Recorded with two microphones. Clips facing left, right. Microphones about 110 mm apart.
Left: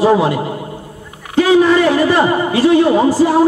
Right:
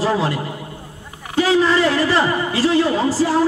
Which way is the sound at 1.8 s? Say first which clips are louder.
Left 5 dB; 15° left (ahead or behind).